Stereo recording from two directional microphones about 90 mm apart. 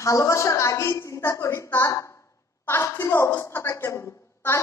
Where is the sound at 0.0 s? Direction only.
35° left (ahead or behind).